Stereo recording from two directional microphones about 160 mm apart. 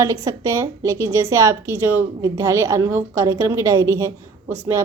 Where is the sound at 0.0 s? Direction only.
20° right (ahead or behind).